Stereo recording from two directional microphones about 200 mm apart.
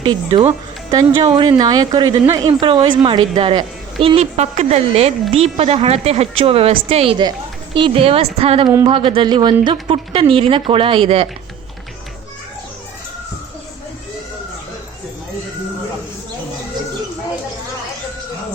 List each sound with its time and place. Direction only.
0.0 s speech: 25° right (ahead or behind)